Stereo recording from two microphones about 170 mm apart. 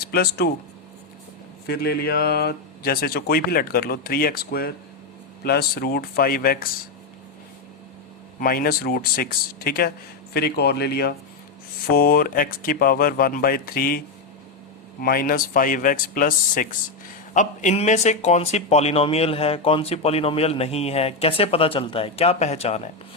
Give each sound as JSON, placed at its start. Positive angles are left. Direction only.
{"t": 0.1, "sound": "speech", "side_deg": 70}
{"t": 1.6, "sound": "speech", "side_deg": 70}
{"t": 8.4, "sound": "speech", "side_deg": 60}
{"t": 11.9, "sound": "speech", "side_deg": 60}
{"t": 15.0, "sound": "speech", "side_deg": 60}